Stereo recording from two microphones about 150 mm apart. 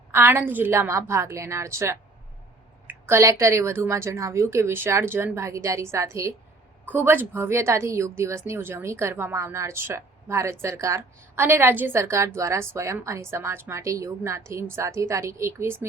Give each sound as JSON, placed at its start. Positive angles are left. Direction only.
{"t": 0.1, "sound": "a woman's voice", "side_deg": -15}